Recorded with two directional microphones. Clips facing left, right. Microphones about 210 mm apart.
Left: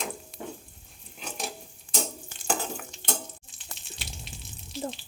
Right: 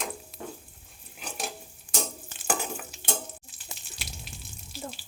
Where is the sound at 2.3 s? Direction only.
10° right (ahead or behind).